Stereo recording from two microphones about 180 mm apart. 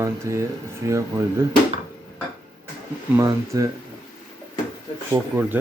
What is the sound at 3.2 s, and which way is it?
Speech, 20° right (ahead or behind).